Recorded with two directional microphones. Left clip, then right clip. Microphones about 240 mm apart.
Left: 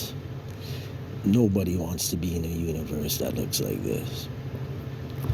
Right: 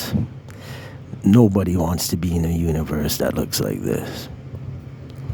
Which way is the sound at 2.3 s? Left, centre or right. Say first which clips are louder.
Right 7 dB; right.